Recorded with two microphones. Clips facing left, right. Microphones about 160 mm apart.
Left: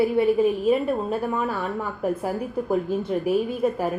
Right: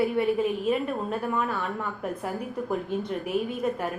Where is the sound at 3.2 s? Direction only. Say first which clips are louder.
Left 6 dB; 30° left (ahead or behind).